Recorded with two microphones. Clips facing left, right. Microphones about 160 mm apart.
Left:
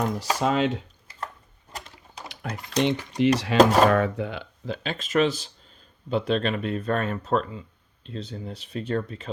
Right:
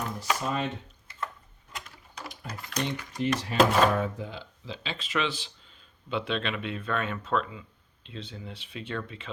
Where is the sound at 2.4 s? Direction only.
80° left.